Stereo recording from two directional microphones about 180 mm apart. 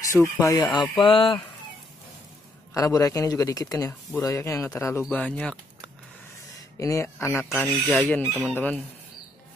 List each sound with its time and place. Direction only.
0.4 s a man's voice: 20° left (ahead or behind)
2.7 s a man's voice: 20° left (ahead or behind)
6.8 s speech: 15° left (ahead or behind)
8.3 s chicken: centre (ahead or behind)
8.5 s speech: 10° left (ahead or behind)